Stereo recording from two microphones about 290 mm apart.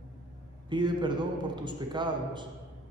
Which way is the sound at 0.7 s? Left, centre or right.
Centre.